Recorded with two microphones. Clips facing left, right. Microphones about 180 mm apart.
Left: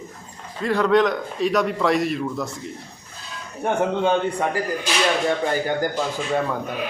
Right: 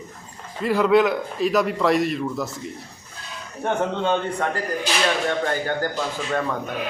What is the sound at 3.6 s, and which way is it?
Speech, 10° left (ahead or behind).